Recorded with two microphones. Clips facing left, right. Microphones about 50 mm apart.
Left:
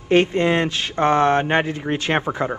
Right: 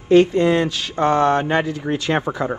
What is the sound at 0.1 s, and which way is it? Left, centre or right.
Speech, left.